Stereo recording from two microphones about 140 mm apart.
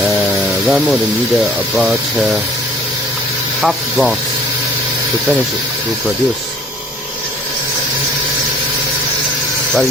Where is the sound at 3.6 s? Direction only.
Centre (ahead or behind).